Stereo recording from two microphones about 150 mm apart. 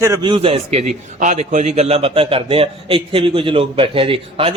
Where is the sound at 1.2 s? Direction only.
55° right (ahead or behind).